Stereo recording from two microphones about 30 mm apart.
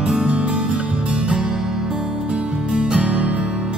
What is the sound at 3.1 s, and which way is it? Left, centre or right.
Music, right.